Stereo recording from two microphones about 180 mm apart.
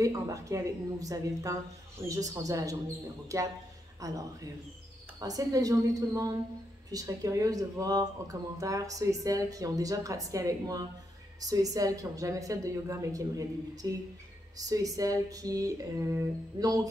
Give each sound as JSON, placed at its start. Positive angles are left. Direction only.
{"t": 0.0, "sound": "speech", "side_deg": -20}